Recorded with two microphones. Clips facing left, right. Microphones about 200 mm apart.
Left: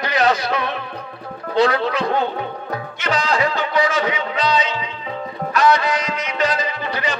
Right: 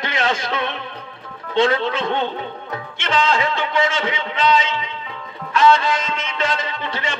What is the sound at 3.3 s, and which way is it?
Music, 25° right (ahead or behind).